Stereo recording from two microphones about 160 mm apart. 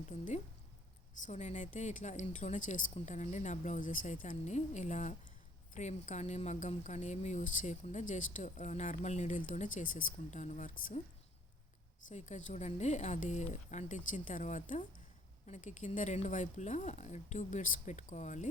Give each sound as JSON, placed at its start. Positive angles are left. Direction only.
{"t": 1.1, "sound": "speech", "side_deg": 50}